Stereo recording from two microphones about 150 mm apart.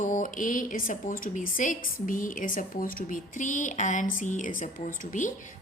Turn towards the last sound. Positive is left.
turn(degrees=60)  # may be behind; listen again after turning